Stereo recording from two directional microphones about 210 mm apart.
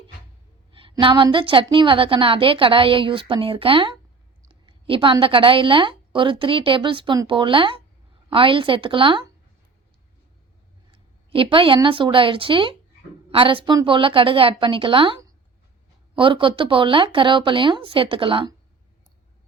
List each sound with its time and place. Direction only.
0.7 s a woman's voice: 25° right (ahead or behind)
10.9 s a woman's voice: 25° right (ahead or behind)